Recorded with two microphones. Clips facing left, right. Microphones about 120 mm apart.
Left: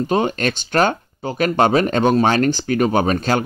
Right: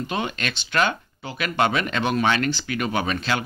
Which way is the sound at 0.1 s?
40° left (ahead or behind).